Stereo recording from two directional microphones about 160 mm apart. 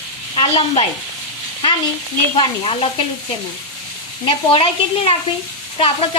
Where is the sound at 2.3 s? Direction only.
35° left (ahead or behind).